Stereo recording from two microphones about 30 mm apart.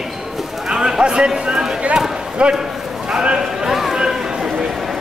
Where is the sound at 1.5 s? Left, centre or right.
Right.